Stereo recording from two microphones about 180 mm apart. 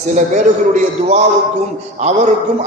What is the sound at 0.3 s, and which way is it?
A man's voice, 45° right (ahead or behind).